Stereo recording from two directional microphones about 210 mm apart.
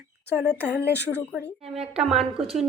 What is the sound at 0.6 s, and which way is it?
Speech, 50° left (ahead or behind).